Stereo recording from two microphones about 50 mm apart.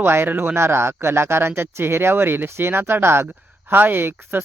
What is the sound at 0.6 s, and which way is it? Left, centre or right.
Speech, right.